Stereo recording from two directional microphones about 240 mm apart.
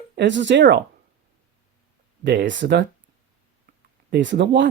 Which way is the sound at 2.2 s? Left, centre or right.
Right.